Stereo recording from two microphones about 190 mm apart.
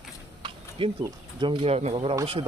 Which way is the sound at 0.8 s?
30° right (ahead or behind).